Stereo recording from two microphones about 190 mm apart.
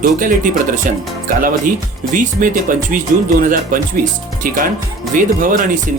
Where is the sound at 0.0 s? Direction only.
45° right (ahead or behind).